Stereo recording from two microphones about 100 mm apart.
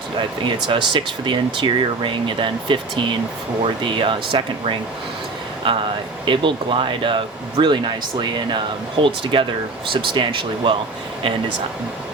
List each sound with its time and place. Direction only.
0.4 s speech: 55° right (ahead or behind)